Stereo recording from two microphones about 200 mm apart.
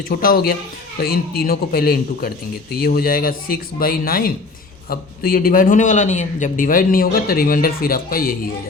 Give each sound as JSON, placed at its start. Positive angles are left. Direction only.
{"t": 0.1, "sound": "a man's voice", "side_deg": 45}